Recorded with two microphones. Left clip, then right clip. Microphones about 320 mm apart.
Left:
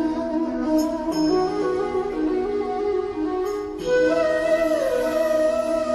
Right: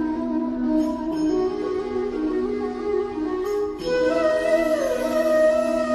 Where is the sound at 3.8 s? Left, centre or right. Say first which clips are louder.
Left 2 dB; centre.